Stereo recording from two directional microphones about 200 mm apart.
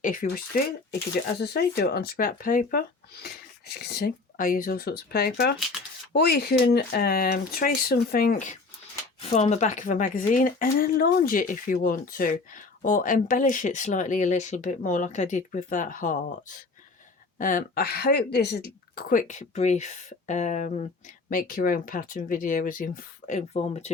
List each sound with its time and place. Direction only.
0.0 s speech: 45° left (ahead or behind)